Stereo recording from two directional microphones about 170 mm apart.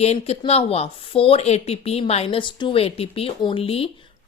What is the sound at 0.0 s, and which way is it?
Speech, 40° left (ahead or behind).